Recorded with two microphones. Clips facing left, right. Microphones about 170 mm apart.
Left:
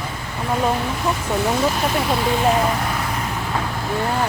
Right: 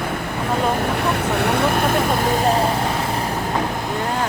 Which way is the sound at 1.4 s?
60° right (ahead or behind).